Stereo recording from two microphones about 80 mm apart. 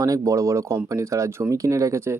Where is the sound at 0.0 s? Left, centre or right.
Right.